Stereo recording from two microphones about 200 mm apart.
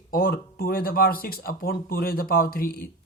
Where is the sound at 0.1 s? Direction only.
45° left (ahead or behind).